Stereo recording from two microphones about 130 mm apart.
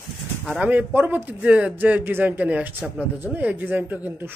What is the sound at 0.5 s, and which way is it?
A man's voice, 10° right (ahead or behind).